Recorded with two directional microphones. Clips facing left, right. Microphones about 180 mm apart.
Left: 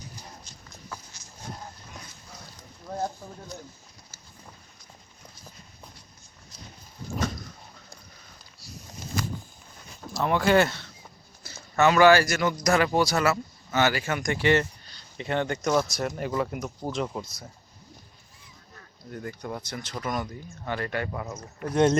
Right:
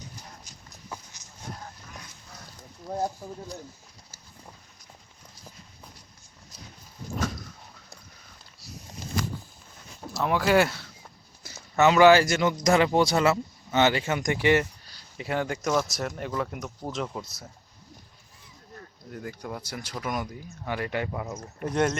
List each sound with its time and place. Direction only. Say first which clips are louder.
3.2 s speech: right 4 dB; 10° right (ahead or behind)
10.2 s speech: left 1 dB; 5° right (ahead or behind)
11.4 s a man's voice: right 1 dB; 20° right (ahead or behind); by 17.3 s centre (ahead or behind)
19.1 s speech: left 1 dB; 5° right (ahead or behind)